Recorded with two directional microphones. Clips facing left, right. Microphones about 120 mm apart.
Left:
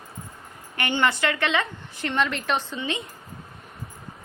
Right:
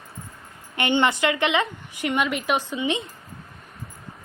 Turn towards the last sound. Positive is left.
turn(degrees=-15)  # may be behind; listen again after turning